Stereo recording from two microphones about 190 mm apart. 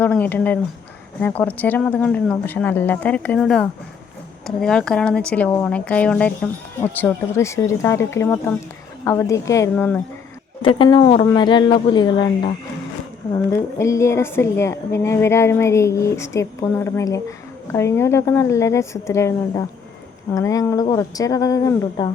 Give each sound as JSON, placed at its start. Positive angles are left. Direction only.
{"t": 0.0, "sound": "a woman's voice", "side_deg": 10}
{"t": 10.6, "sound": "speech", "side_deg": 25}
{"t": 13.5, "sound": "a woman's voice", "side_deg": 15}